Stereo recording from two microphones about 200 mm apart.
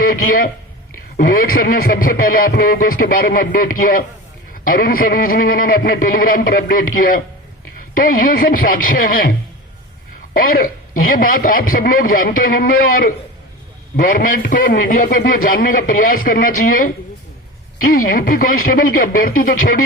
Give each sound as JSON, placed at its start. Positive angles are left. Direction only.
{"t": 0.0, "sound": "a man's voice", "side_deg": 45}
{"t": 10.3, "sound": "a man's voice", "side_deg": 45}